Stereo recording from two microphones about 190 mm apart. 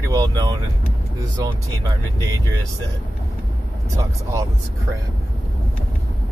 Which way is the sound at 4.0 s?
15° right (ahead or behind).